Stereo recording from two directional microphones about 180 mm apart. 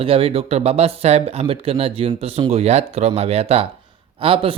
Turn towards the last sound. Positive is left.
turn(degrees=-30)  # may be behind; listen again after turning